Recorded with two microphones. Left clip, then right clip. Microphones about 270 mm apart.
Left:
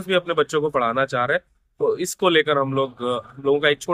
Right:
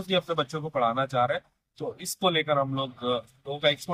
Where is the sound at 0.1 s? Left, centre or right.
Centre.